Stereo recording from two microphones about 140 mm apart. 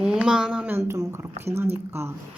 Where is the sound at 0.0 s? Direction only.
5° right (ahead or behind).